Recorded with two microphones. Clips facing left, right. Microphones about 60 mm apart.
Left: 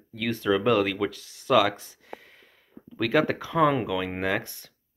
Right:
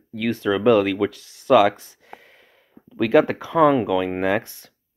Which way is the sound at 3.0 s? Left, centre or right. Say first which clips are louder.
Right 6 dB; centre.